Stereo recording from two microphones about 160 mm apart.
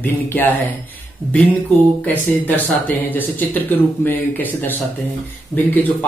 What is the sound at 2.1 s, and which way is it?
Speech, 10° left (ahead or behind).